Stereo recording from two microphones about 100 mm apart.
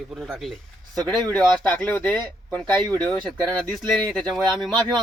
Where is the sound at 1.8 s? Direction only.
15° left (ahead or behind).